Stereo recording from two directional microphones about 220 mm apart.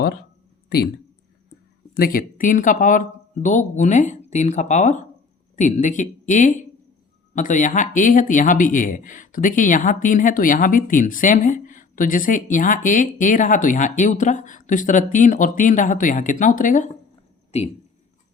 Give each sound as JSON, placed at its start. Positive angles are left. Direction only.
{"t": 2.0, "sound": "a man's voice", "side_deg": 40}